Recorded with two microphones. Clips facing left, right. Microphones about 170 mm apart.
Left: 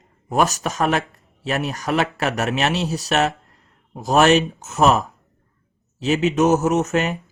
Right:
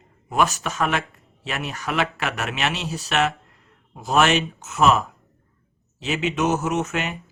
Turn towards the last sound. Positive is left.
turn(degrees=40)  # may be behind; listen again after turning